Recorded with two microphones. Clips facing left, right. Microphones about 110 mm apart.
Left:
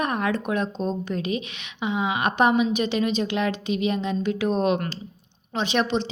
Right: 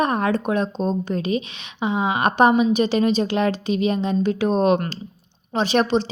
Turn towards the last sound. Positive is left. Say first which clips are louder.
# right 5 dB
turn(degrees=-40)  # may be behind; listen again after turning